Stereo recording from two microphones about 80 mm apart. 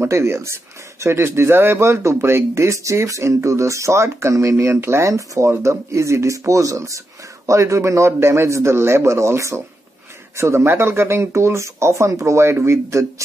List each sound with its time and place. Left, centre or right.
0.0 s speech: right